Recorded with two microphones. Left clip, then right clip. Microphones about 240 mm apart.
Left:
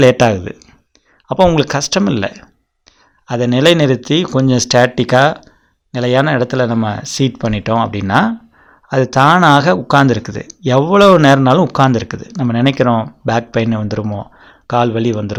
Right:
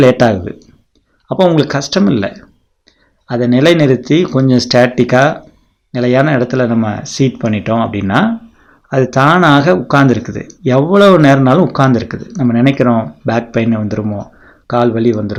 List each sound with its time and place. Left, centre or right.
0.0 s speech: left